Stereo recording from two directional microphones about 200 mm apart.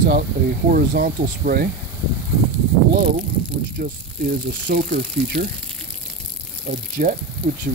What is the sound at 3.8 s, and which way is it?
Speech, 50° right (ahead or behind).